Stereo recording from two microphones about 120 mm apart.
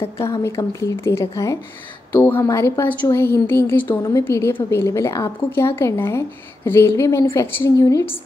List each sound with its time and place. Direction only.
0.4 s speech: 25° left (ahead or behind)